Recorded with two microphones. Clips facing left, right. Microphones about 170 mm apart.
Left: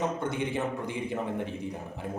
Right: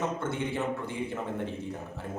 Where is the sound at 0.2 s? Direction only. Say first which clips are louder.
Left 1 dB; 15° left (ahead or behind).